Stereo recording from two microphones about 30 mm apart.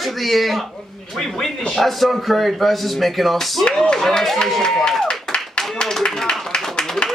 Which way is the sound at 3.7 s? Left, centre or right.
Centre.